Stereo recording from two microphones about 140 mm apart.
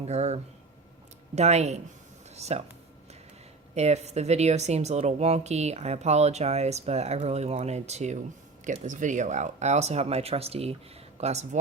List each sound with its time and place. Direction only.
0.1 s speech: 55° right (ahead or behind)
1.4 s speech: 50° right (ahead or behind)
3.8 s speech: 50° right (ahead or behind)